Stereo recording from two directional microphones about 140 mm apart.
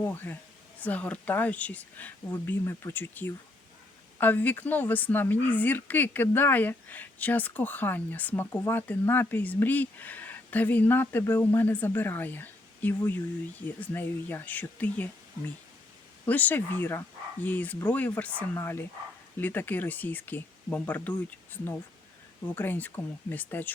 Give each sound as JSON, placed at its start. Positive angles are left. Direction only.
{"t": 0.0, "sound": "a woman's voice", "side_deg": 15}
{"t": 16.2, "sound": "a woman's voice", "side_deg": 10}